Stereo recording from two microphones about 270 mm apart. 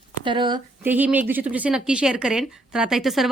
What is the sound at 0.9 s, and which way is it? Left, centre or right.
Speech, centre.